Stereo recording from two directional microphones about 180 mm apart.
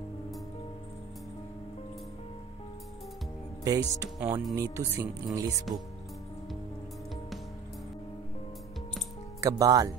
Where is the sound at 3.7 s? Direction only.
20° right (ahead or behind).